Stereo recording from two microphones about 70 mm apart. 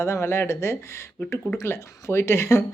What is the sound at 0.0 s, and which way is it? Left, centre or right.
Speech, left.